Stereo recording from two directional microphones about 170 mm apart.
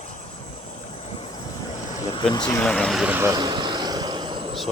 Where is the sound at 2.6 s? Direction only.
5° left (ahead or behind); by 4.6 s 30° right (ahead or behind).